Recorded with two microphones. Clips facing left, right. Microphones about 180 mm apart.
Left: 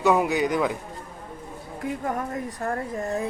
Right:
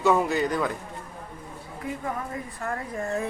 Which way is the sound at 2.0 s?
45° left (ahead or behind).